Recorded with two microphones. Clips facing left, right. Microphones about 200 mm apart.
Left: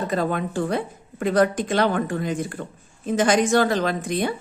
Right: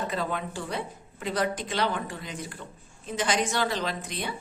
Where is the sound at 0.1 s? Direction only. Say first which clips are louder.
Left 7 dB; 50° left (ahead or behind).